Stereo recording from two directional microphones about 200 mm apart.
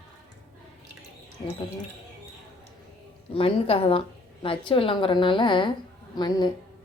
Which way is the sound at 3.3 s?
30° left (ahead or behind).